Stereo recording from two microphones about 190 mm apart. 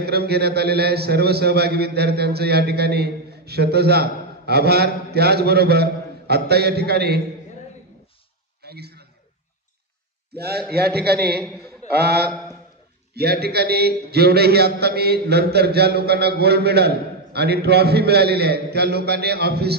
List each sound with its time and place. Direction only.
0.0 s a man's voice: 55° right (ahead or behind)
8.6 s a sound: 55° right (ahead or behind)
10.3 s a man's voice: 55° right (ahead or behind)
12.3 s a man's voice: 15° right (ahead or behind)
13.1 s a man's voice: 55° right (ahead or behind)